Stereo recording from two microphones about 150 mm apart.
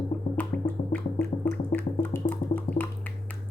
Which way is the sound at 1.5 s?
10° left (ahead or behind).